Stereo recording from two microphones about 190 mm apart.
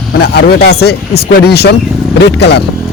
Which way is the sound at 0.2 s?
55° left (ahead or behind).